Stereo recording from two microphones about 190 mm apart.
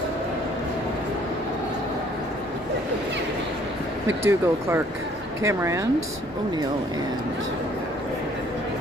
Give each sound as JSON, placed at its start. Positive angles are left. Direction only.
{"t": 4.2, "sound": "speech", "side_deg": -15}